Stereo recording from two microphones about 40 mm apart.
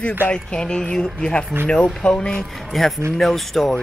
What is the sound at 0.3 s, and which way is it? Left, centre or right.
Speech, left.